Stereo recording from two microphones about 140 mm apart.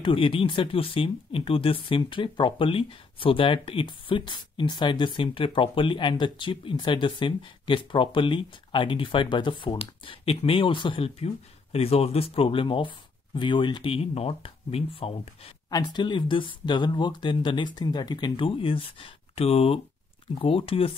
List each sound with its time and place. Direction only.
0.0 s speech: 40° left (ahead or behind)
15.7 s speech: 30° left (ahead or behind)